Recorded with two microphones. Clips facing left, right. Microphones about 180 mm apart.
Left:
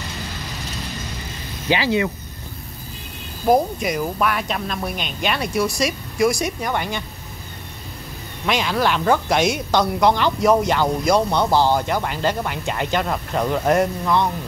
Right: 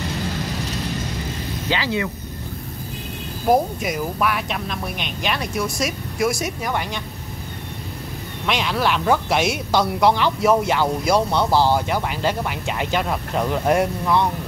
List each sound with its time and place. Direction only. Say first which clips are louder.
1.7 s speech: left 4 dB; 15° left (ahead or behind)
3.4 s speech: left 1 dB; 5° right (ahead or behind)
8.5 s speech: left 1 dB; centre (ahead or behind)